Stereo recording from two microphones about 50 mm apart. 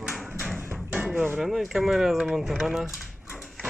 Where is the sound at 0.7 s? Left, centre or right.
Right.